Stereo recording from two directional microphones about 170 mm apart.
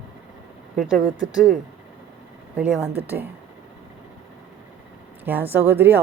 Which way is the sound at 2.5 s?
5° right (ahead or behind).